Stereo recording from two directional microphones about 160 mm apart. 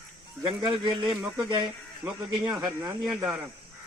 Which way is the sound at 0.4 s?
30° right (ahead or behind).